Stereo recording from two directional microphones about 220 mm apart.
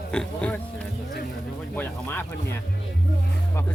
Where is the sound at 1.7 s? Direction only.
10° left (ahead or behind).